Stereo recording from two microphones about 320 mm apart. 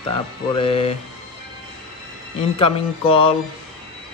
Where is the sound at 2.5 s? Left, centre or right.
Centre.